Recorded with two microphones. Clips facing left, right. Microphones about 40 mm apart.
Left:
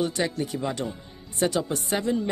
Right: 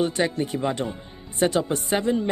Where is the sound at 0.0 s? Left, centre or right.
Right.